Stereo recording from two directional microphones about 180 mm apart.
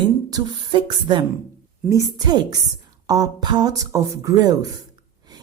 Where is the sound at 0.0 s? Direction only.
25° right (ahead or behind).